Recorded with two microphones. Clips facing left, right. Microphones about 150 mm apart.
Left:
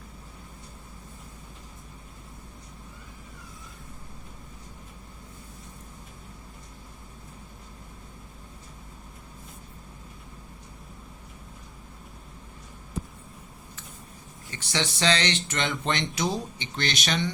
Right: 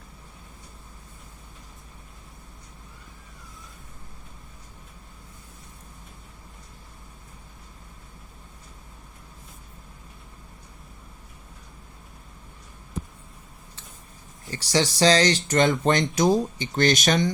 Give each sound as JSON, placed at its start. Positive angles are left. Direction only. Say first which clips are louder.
{"t": 14.5, "sound": "speech", "louder": "right 7 dB", "side_deg": -35}